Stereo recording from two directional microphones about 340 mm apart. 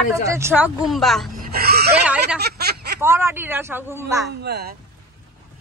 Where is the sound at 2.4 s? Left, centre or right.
Right.